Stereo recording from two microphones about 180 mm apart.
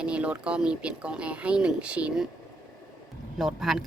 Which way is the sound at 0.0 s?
5° right (ahead or behind).